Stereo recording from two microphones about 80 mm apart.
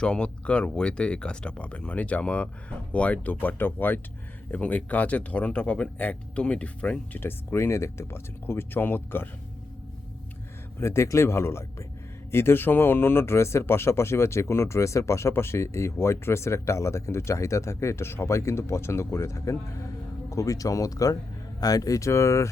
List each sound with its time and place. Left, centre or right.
0.0 s speech: centre
7.2 s speech: left
10.8 s speech: left